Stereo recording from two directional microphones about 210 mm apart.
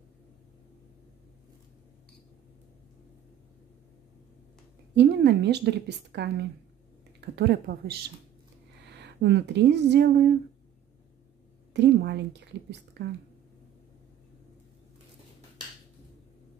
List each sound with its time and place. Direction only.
4.9 s a woman's voice: 55° right (ahead or behind)
8.9 s speech: 55° right (ahead or behind)
11.7 s a woman's voice: 55° right (ahead or behind)